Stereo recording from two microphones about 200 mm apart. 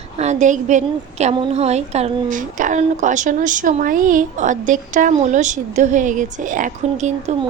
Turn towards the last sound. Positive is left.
turn(degrees=-35)  # may be behind; listen again after turning